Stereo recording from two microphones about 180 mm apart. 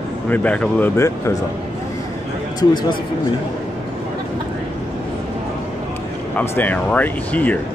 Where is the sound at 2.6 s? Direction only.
25° left (ahead or behind).